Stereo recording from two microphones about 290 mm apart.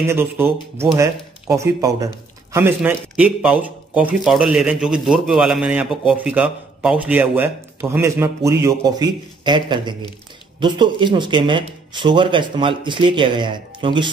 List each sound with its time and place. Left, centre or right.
0.1 s a man's voice: centre